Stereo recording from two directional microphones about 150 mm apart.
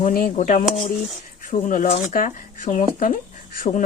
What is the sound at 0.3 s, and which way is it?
Speech, 55° left (ahead or behind).